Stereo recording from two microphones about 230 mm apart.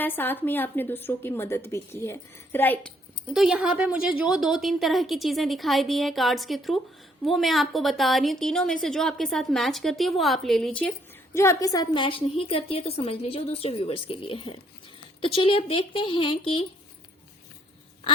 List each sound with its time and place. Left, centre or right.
0.0 s a woman's voice: centre
3.3 s a woman's voice: centre; by 16.6 s left